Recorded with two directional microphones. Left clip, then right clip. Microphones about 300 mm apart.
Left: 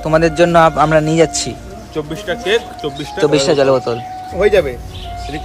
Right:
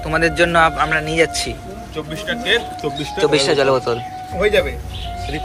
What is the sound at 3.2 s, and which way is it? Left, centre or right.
Speech, centre.